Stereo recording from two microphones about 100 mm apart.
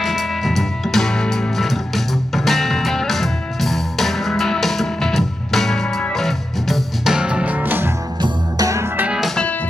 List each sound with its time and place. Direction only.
0.0 s music: centre (ahead or behind); by 7.9 s 20° right (ahead or behind)
8.2 s music: 35° right (ahead or behind)
8.9 s music: 15° right (ahead or behind)